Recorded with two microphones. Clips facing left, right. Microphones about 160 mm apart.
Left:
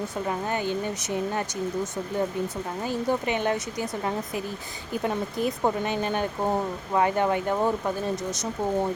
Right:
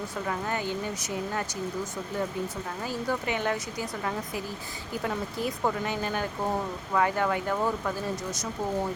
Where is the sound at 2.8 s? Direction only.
20° left (ahead or behind).